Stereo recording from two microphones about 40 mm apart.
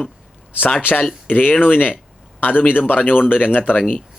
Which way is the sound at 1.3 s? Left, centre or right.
Left.